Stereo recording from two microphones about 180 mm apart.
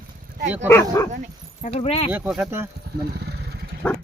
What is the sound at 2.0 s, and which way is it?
Speech, 10° right (ahead or behind).